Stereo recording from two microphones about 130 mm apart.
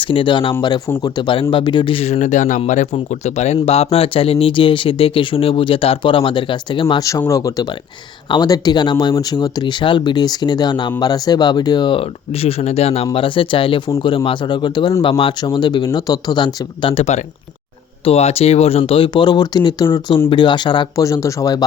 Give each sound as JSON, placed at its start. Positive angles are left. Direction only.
{"t": 0.0, "sound": "speech", "side_deg": 40}
{"t": 7.3, "sound": "speech", "side_deg": 25}
{"t": 21.0, "sound": "speech", "side_deg": 25}